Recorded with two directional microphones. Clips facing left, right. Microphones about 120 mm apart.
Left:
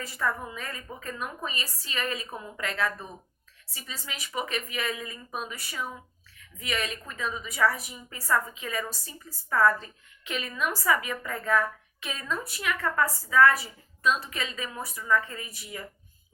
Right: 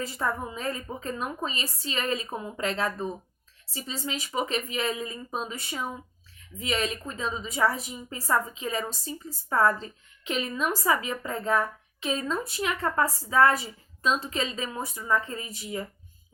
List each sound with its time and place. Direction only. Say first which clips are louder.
0.0 s a woman's voice: right 1 dB; 30° right (ahead or behind)